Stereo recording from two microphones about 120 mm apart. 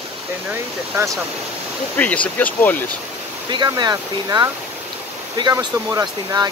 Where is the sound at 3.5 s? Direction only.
35° right (ahead or behind).